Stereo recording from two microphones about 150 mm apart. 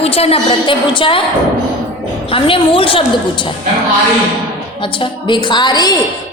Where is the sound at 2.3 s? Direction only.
35° left (ahead or behind).